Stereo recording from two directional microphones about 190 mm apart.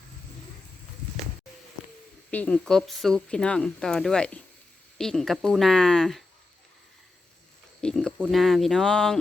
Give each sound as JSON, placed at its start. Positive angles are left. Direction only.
{"t": 2.3, "sound": "speech", "side_deg": 5}
{"t": 7.8, "sound": "a sound", "side_deg": 5}
{"t": 8.2, "sound": "speech", "side_deg": 0}